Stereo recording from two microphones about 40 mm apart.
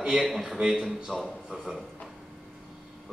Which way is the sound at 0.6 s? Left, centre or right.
Centre.